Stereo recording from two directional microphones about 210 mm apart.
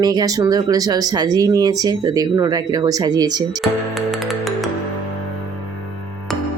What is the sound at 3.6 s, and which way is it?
Music, centre (ahead or behind).